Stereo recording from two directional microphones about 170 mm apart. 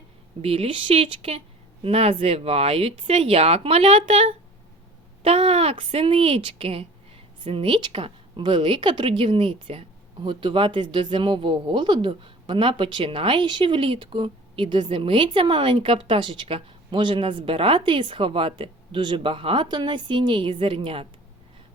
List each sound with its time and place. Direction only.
0.4 s speech: 35° right (ahead or behind)